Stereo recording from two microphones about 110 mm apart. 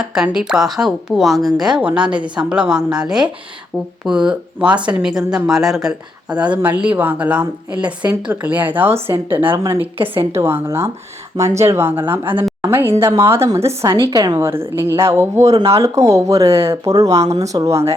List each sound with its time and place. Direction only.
0.0 s a woman's voice: 5° right (ahead or behind); by 14.4 s 35° right (ahead or behind)
14.4 s speech: 20° right (ahead or behind)